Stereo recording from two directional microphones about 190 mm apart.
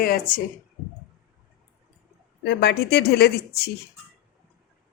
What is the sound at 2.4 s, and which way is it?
Speech, 60° left (ahead or behind).